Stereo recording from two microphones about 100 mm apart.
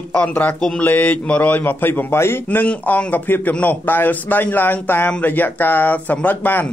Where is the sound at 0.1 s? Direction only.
15° left (ahead or behind).